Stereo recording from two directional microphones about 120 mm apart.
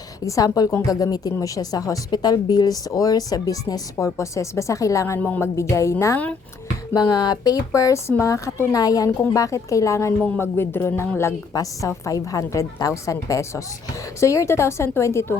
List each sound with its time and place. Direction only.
0.3 s speech: 30° left (ahead or behind)
5.2 s music: 15° left (ahead or behind)
5.5 s speech: 25° left (ahead or behind)
10.2 s music: 10° left (ahead or behind)
10.4 s speech: 20° left (ahead or behind)